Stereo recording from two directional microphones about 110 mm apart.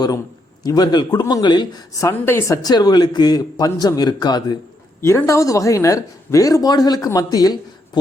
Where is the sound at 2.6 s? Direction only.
40° left (ahead or behind).